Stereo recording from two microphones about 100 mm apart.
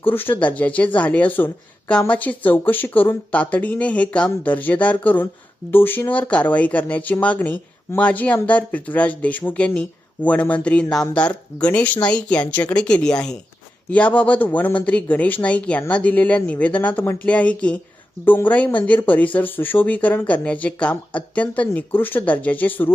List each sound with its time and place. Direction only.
0.0 s speech: 20° left (ahead or behind)